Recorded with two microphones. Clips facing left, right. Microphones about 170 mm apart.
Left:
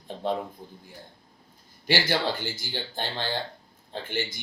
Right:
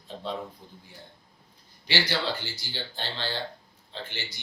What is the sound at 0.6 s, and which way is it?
Speech, 50° left (ahead or behind).